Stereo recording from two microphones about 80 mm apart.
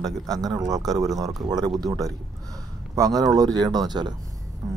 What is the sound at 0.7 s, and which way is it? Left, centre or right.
Speech, right.